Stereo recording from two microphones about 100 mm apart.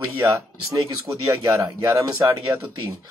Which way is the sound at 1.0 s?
30° right (ahead or behind).